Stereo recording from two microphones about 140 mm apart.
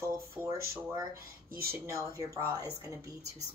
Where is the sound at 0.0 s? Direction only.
20° right (ahead or behind).